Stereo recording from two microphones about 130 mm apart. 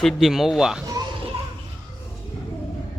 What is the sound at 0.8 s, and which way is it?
Children playing, 30° right (ahead or behind).